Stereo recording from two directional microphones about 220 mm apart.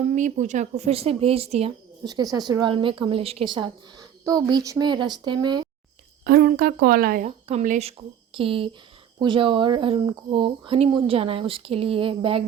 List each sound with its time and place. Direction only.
0.0 s speech: 35° right (ahead or behind)
2.0 s speech: 15° right (ahead or behind)
6.2 s speech: 45° right (ahead or behind)
7.3 s speech: 30° right (ahead or behind)